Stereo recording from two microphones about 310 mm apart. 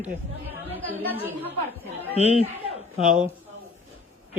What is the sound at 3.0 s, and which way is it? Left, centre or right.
Speech, centre.